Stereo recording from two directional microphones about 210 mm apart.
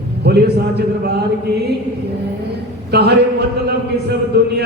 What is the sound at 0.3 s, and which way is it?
Chant, 50° right (ahead or behind).